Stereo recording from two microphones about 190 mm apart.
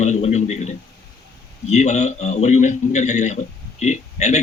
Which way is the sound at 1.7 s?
35° left (ahead or behind).